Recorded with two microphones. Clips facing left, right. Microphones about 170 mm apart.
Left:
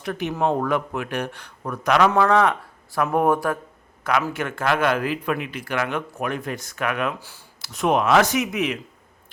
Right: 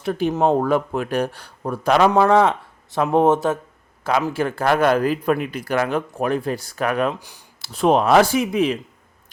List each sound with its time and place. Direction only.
0.0 s a man's voice: 30° right (ahead or behind)
7.2 s speech: 15° right (ahead or behind)
7.6 s a man's voice: 30° right (ahead or behind)